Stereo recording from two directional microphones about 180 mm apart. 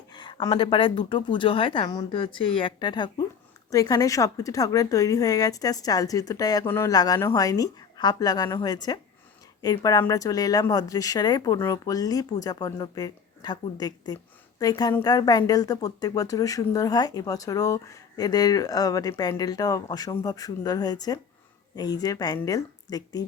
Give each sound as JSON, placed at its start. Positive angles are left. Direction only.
{"t": 0.1, "sound": "speech", "side_deg": 25}